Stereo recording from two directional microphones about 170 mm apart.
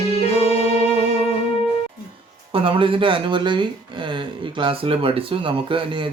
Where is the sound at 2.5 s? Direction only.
30° right (ahead or behind).